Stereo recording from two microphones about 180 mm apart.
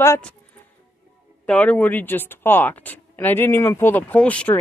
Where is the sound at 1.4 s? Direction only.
5° left (ahead or behind).